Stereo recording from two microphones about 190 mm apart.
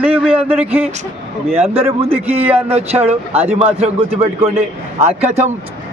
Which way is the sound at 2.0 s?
30° right (ahead or behind).